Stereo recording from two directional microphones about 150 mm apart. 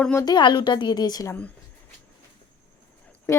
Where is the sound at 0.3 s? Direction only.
30° left (ahead or behind).